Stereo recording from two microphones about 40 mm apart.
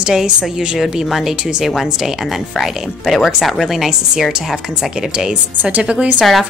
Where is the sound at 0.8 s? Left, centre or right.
Centre.